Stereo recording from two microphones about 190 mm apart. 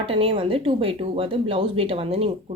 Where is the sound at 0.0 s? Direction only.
30° right (ahead or behind).